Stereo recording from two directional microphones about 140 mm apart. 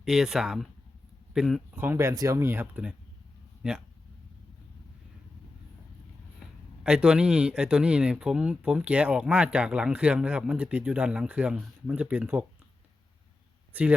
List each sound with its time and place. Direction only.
0.0 s speech: 5° right (ahead or behind)
1.8 s speech: 15° right (ahead or behind)
6.8 s speech: 5° right (ahead or behind)